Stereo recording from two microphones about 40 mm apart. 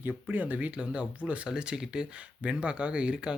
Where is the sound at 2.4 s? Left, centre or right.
Right.